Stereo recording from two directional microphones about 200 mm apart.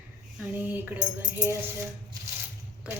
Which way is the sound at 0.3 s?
10° right (ahead or behind).